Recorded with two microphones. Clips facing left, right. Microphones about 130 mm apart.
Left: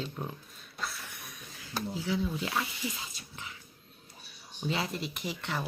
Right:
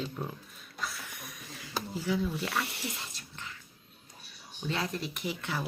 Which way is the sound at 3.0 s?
5° left (ahead or behind).